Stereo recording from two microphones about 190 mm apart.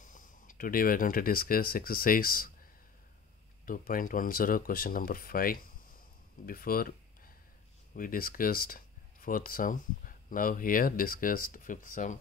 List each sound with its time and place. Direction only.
0.0 s speech: 45° left (ahead or behind)
3.6 s speech: 45° left (ahead or behind)